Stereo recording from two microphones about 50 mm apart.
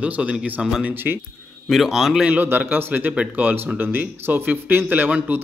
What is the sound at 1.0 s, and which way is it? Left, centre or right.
Speech, right.